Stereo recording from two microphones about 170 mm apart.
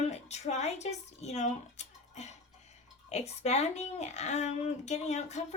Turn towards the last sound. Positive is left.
turn(degrees=40)  # may be behind; listen again after turning